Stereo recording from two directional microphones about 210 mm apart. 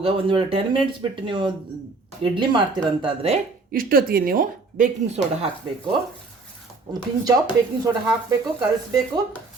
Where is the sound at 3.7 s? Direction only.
45° right (ahead or behind).